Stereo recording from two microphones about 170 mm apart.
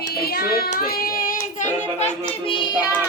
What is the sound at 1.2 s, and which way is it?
Child singing, 45° left (ahead or behind).